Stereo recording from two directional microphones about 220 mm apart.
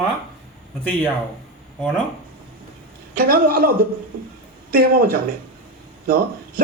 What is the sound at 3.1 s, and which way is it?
A man's voice, 40° right (ahead or behind).